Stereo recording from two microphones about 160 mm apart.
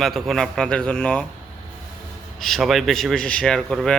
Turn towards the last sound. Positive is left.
turn(degrees=5)  # may be behind; listen again after turning